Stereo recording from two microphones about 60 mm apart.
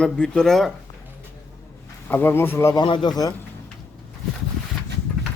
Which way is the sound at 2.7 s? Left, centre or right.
Left.